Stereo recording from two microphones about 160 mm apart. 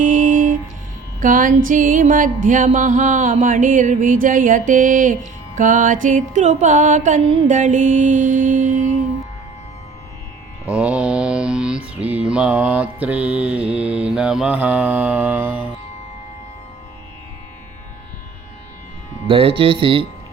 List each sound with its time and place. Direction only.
0.0 s music: 55° right (ahead or behind)
10.7 s mantra: 10° right (ahead or behind)
19.3 s speech: 35° right (ahead or behind)